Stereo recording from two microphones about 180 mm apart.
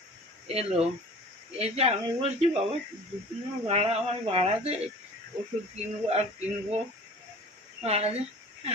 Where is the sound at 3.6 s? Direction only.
35° right (ahead or behind).